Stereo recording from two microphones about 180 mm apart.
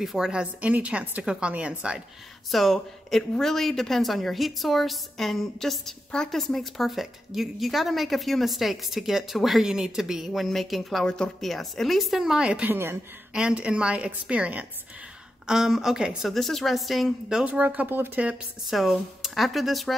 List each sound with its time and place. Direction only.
0.0 s speech: 5° right (ahead or behind)